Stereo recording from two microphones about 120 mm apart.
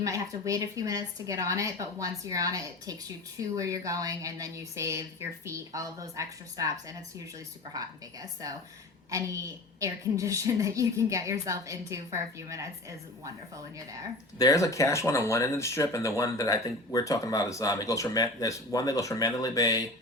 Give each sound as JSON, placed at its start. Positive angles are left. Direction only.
{"t": 0.0, "sound": "a woman's voice", "side_deg": -30}
{"t": 14.3, "sound": "speech", "side_deg": 30}